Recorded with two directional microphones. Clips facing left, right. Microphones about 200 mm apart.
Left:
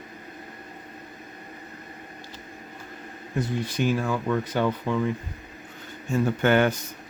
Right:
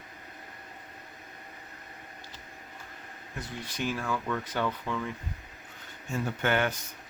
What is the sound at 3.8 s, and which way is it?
Speech, 15° left (ahead or behind).